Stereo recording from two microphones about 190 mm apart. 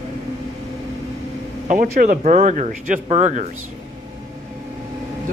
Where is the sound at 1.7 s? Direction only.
45° right (ahead or behind).